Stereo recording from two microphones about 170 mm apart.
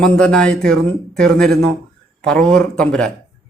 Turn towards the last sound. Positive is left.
turn(degrees=5)  # may be behind; listen again after turning